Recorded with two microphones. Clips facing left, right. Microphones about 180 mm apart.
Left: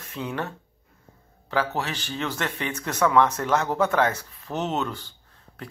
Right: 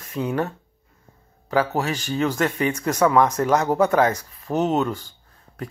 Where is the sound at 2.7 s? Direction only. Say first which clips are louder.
Even; 10° right (ahead or behind).